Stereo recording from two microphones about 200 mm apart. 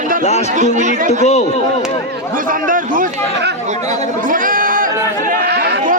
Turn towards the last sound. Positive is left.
turn(degrees=-55)  # may be behind; listen again after turning